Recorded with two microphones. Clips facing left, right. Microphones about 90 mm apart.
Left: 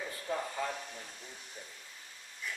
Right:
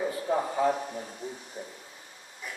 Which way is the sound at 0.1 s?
25° right (ahead or behind).